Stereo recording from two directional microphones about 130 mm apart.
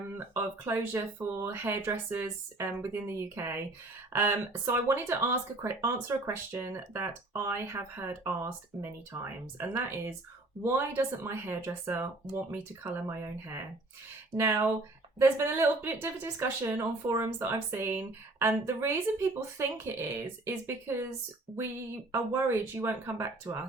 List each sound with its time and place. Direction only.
0.3 s speech: 20° right (ahead or behind)
22.1 s speech: 15° right (ahead or behind)